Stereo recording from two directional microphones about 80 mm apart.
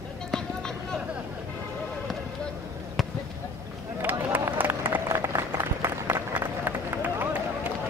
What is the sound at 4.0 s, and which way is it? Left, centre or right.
Run, right.